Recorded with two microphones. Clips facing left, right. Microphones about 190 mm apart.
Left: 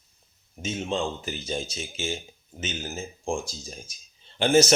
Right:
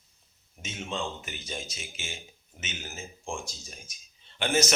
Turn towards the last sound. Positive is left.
turn(degrees=30)  # may be behind; listen again after turning